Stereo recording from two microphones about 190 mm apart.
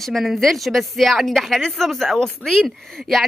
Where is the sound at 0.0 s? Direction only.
Centre (ahead or behind).